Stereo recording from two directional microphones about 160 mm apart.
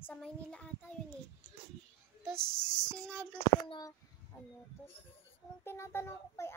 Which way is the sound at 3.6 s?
25° left (ahead or behind).